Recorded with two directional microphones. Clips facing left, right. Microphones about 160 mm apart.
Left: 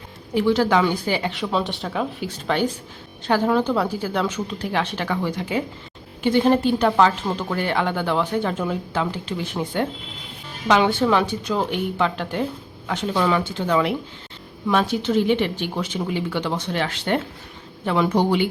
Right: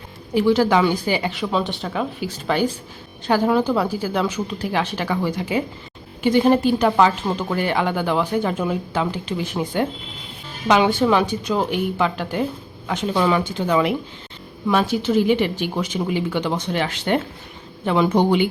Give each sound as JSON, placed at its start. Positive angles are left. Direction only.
{"t": 0.3, "sound": "speech", "side_deg": -10}